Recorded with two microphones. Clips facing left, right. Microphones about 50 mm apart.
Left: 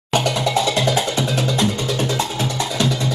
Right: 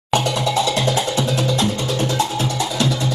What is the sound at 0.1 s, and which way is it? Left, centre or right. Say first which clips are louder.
Music: even; left.